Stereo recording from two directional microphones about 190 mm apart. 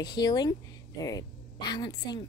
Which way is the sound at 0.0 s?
20° left (ahead or behind).